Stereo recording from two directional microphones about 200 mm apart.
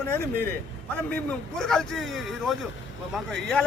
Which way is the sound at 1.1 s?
5° left (ahead or behind).